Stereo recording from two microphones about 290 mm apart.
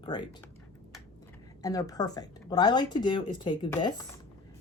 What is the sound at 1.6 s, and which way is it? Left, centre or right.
Speech, centre.